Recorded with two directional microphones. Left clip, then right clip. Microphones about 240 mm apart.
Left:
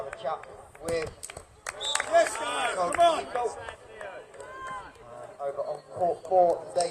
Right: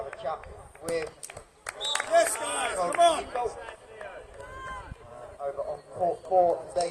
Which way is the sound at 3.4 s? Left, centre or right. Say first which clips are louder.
Left 1 dB; left.